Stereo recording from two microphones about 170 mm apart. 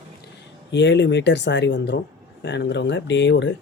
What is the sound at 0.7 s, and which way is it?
Speech, 90° left.